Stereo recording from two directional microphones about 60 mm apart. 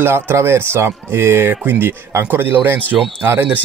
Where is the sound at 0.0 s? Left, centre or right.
Right.